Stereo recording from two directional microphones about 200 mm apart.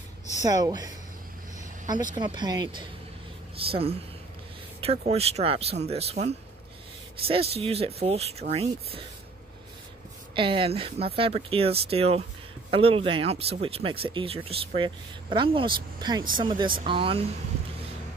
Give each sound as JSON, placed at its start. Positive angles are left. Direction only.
{"t": 0.5, "sound": "speech", "side_deg": -20}
{"t": 2.1, "sound": "speech", "side_deg": -20}
{"t": 10.3, "sound": "speech", "side_deg": -25}